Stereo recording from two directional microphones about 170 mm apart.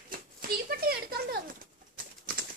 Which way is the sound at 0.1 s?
60° right (ahead or behind).